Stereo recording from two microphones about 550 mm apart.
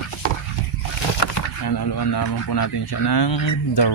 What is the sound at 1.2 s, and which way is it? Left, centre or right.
Speech, left.